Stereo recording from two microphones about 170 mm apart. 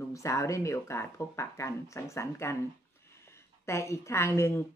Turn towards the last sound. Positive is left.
turn(degrees=15)  # may be behind; listen again after turning